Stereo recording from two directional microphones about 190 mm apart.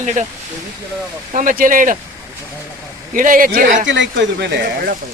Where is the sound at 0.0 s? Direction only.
40° right (ahead or behind).